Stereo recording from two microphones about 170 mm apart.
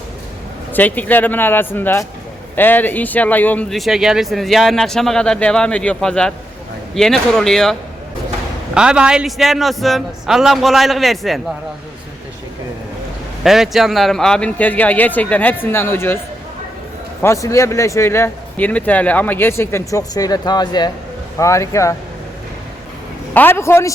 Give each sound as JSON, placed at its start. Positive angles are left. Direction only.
{"t": 0.7, "sound": "a man's voice", "side_deg": 10}
{"t": 13.4, "sound": "a man's voice", "side_deg": 0}
{"t": 17.2, "sound": "a man's voice", "side_deg": 20}
{"t": 23.3, "sound": "a man's voice", "side_deg": 10}